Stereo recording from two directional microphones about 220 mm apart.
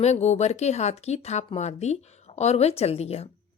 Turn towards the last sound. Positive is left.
turn(degrees=30)  # may be behind; listen again after turning